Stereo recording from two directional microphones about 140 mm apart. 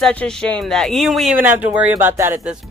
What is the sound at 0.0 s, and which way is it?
Speech, 5° left (ahead or behind).